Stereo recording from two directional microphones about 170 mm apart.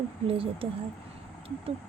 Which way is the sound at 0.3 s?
35° right (ahead or behind).